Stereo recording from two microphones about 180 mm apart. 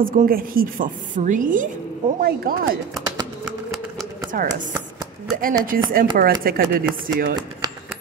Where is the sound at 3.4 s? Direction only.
Centre (ahead or behind).